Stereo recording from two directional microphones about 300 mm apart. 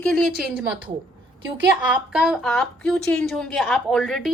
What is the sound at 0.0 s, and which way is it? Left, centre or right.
Speech, centre.